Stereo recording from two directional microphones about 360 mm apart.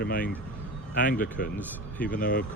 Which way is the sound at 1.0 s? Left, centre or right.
Left.